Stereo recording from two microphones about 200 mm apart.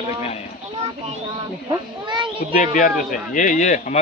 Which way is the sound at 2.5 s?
40° left (ahead or behind).